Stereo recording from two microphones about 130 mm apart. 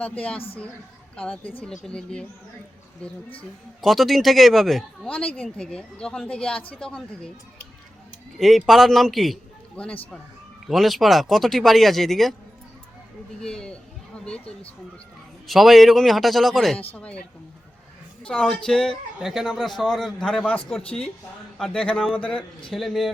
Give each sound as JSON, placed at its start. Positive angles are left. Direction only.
{"t": 0.0, "sound": "speech", "side_deg": 10}
{"t": 0.3, "sound": "a woman's voice", "side_deg": 45}
{"t": 1.1, "sound": "a man's voice", "side_deg": 10}
{"t": 8.4, "sound": "a man's voice", "side_deg": 0}
{"t": 13.4, "sound": "a man's voice", "side_deg": 5}
{"t": 15.4, "sound": "a man's voice", "side_deg": 0}